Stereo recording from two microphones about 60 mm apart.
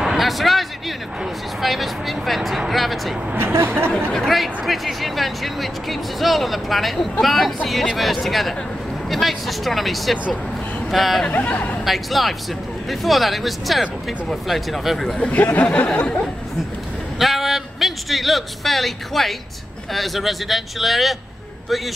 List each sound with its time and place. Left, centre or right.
0.0 s a sound: centre
1.6 s speech: centre
11.2 s speech: left
11.8 s speech: centre
15.1 s speech: centre
17.2 s a sound: centre
19.9 s speech: centre